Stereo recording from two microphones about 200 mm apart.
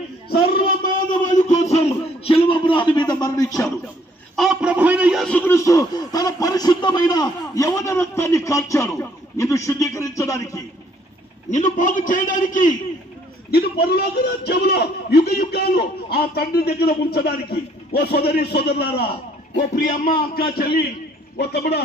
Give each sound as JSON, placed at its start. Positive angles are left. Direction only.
{"t": 0.3, "sound": "a sound", "side_deg": 45}
{"t": 4.4, "sound": "a man's voice", "side_deg": -5}
{"t": 11.5, "sound": "a man's voice", "side_deg": 40}
{"t": 13.5, "sound": "a man's voice", "side_deg": 50}